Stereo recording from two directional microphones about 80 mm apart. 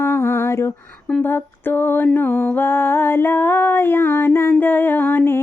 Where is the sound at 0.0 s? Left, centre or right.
Left.